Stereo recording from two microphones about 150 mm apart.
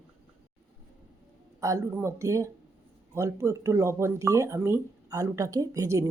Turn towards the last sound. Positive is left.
turn(degrees=-20)  # may be behind; listen again after turning